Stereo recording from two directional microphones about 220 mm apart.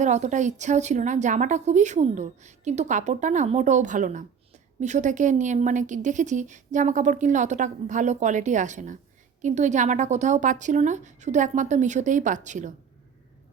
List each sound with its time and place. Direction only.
0.0 s a woman's voice: 30° right (ahead or behind)